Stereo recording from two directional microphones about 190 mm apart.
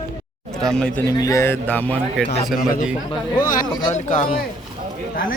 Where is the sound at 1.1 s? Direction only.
20° left (ahead or behind).